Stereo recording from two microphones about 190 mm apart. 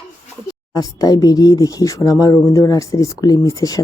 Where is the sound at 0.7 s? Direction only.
20° left (ahead or behind).